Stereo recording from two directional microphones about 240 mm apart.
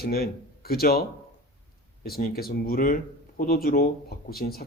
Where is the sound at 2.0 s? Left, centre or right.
Left.